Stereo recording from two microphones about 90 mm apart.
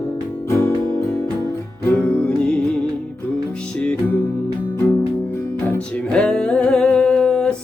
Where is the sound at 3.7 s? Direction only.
10° left (ahead or behind).